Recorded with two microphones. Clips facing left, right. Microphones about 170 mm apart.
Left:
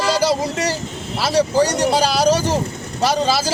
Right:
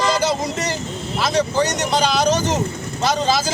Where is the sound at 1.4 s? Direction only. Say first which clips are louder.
Left 4 dB; 35° left (ahead or behind).